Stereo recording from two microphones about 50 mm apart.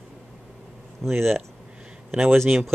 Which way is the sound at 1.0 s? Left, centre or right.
Centre.